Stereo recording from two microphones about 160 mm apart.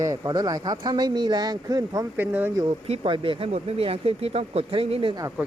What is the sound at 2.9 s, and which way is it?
Speech, 35° right (ahead or behind).